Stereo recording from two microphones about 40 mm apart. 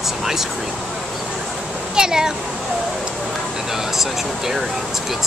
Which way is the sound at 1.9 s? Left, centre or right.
Centre.